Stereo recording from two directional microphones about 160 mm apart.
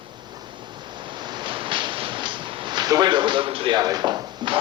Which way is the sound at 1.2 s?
30° right (ahead or behind).